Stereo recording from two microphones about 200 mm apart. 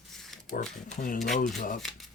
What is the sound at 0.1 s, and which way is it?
Pig, centre (ahead or behind).